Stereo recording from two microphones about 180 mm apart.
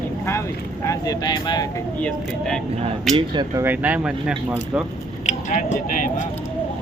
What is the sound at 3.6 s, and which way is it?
Speech, 10° right (ahead or behind).